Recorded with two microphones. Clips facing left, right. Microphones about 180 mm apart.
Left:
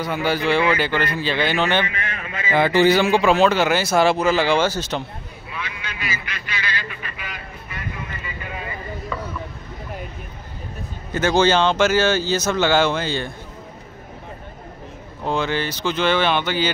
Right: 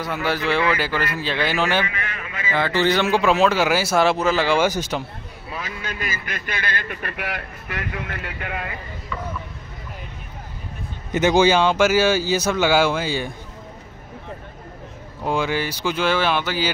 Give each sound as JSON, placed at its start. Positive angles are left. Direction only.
{"t": 0.0, "sound": "speech", "side_deg": 0}
{"t": 2.3, "sound": "speech", "side_deg": 15}
{"t": 3.0, "sound": "speech", "side_deg": 0}
{"t": 4.6, "sound": "speech", "side_deg": -10}
{"t": 5.5, "sound": "a man's voice", "side_deg": -45}
{"t": 11.1, "sound": "speech", "side_deg": -20}
{"t": 15.2, "sound": "speech", "side_deg": -10}